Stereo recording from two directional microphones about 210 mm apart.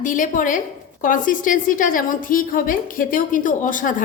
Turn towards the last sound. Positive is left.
turn(degrees=40)  # may be behind; listen again after turning